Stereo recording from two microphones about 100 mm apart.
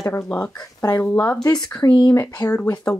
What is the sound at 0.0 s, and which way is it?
Speech, 20° left (ahead or behind).